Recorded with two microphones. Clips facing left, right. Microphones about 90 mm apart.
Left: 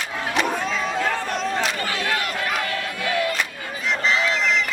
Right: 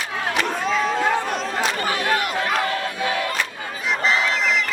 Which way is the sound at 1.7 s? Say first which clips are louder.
Right 3 dB; 20° right (ahead or behind).